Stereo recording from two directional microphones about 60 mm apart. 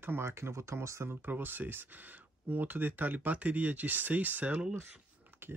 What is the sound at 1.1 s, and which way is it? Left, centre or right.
Speech, right.